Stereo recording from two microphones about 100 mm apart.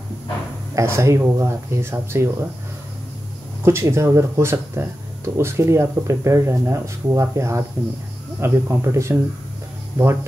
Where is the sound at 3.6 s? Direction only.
25° right (ahead or behind).